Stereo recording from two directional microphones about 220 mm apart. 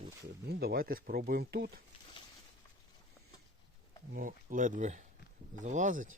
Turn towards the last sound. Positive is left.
turn(degrees=-35)  # may be behind; listen again after turning